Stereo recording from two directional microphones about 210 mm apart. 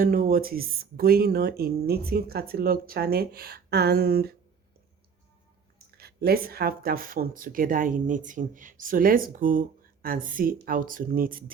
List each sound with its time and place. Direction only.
0.0 s speech: 45° right (ahead or behind)
6.0 s speech: 50° right (ahead or behind)